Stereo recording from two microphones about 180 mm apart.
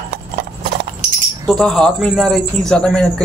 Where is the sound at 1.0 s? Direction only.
45° right (ahead or behind).